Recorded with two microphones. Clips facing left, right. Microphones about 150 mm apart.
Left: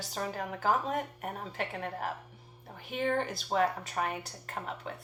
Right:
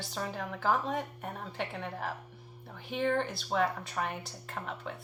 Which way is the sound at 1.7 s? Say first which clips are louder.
Left 1 dB; 45° left (ahead or behind).